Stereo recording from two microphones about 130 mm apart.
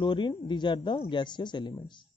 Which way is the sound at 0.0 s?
35° left (ahead or behind).